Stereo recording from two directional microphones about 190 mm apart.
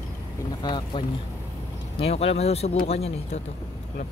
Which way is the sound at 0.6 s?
25° left (ahead or behind).